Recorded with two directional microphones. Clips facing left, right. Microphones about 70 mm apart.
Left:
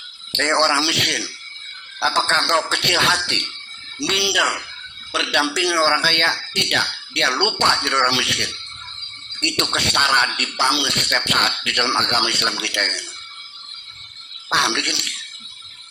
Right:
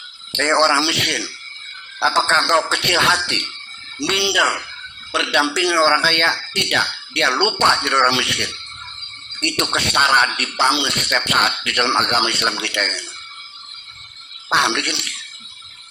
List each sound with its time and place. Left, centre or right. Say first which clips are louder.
0.3 s speech: right 2 dB; right
14.5 s speech: right 2 dB; right